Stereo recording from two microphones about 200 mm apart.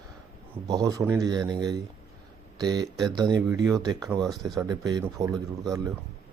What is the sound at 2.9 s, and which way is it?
Speech, centre (ahead or behind).